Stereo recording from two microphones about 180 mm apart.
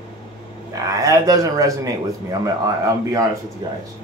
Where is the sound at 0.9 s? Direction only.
20° right (ahead or behind).